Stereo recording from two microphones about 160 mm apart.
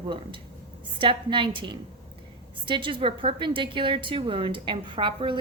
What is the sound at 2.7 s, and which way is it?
A woman's voice, 30° right (ahead or behind).